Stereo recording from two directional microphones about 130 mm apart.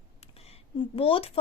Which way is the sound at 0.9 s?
45° left (ahead or behind).